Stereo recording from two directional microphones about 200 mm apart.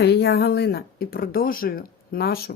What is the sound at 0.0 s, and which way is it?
Speech, 55° left (ahead or behind).